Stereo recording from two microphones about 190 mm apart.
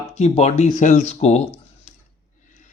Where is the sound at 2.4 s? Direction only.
40° left (ahead or behind).